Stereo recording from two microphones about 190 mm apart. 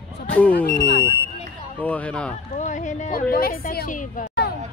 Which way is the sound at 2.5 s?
40° left (ahead or behind).